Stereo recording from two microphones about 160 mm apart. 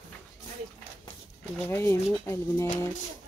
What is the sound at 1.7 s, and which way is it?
Speech, 15° left (ahead or behind).